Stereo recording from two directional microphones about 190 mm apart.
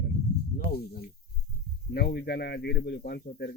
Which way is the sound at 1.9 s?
55° left (ahead or behind).